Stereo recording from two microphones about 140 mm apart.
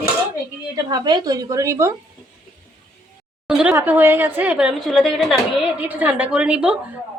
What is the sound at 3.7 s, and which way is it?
A woman's voice, 15° right (ahead or behind).